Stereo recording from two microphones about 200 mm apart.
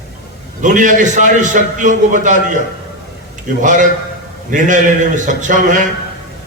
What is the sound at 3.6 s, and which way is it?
A man's voice, 40° right (ahead or behind).